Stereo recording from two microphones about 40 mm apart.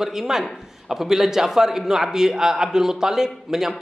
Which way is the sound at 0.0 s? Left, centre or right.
Centre.